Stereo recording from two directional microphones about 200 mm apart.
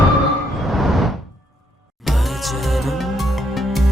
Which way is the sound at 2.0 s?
Centre (ahead or behind).